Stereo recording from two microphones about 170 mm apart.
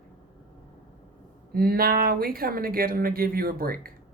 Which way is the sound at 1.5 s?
60° right (ahead or behind).